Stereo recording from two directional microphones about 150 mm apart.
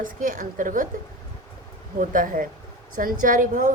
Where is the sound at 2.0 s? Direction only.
65° right (ahead or behind).